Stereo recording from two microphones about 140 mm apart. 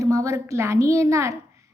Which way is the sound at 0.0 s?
25° right (ahead or behind).